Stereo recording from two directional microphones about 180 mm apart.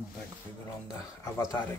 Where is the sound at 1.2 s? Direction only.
15° left (ahead or behind).